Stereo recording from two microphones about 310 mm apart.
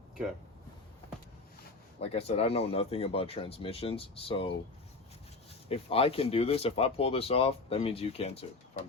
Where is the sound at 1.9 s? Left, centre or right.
Centre.